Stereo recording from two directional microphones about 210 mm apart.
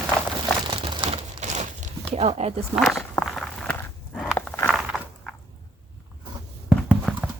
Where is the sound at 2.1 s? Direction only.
30° right (ahead or behind).